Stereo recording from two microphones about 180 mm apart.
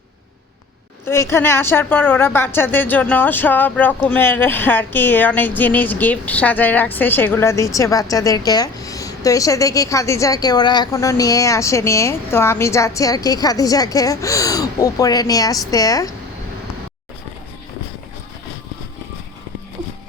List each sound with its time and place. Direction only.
1.0 s a woman's voice: 15° left (ahead or behind)